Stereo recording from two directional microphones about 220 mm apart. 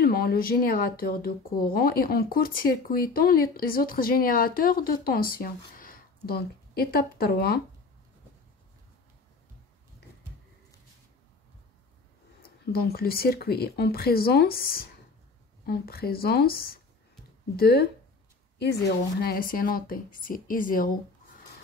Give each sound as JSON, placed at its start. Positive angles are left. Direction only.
{"t": 0.0, "sound": "speech", "side_deg": 45}
{"t": 12.7, "sound": "speech", "side_deg": 45}
{"t": 19.2, "sound": "speech", "side_deg": 40}